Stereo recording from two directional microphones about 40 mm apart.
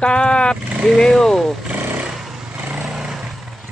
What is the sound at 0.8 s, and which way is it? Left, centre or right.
Speech, centre.